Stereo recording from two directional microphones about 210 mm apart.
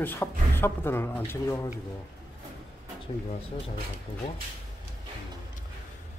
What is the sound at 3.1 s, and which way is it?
Speech, 25° left (ahead or behind).